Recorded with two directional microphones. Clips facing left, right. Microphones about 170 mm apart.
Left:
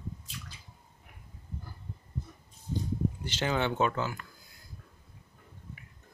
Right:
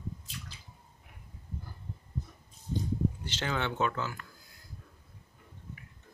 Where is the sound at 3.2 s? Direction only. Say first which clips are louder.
Left 4 dB; 15° left (ahead or behind).